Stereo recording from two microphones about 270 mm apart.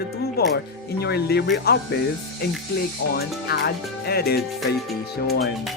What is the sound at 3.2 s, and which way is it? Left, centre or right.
Speech, left.